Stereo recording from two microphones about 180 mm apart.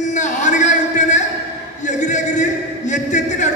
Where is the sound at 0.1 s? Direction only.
45° left (ahead or behind).